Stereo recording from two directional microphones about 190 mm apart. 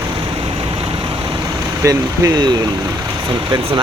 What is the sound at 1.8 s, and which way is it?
Speech, 15° right (ahead or behind).